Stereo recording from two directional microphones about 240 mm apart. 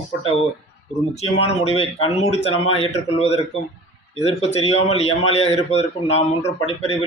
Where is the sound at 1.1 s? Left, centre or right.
Left.